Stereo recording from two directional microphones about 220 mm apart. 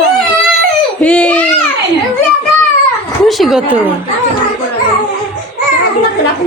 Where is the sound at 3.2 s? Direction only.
Centre (ahead or behind).